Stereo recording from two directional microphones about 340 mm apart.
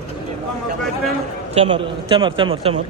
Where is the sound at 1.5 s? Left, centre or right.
Centre.